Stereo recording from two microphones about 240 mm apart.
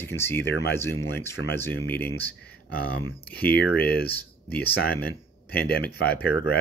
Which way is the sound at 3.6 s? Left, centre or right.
Left.